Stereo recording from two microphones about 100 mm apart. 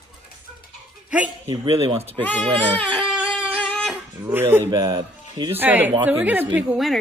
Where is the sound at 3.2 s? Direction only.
10° right (ahead or behind).